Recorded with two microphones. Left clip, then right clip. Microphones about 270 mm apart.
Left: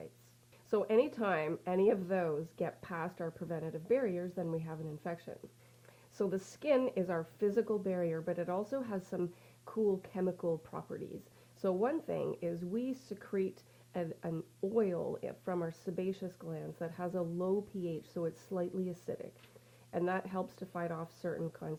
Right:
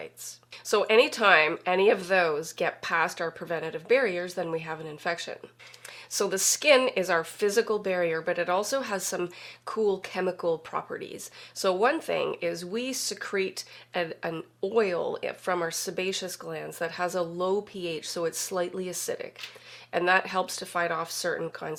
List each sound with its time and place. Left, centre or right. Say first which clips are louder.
0.7 s speech: right 9 dB; centre
10.0 s speech: right 8 dB; centre
17.2 s speech: right 8 dB; right
17.7 s speech: right 8 dB; centre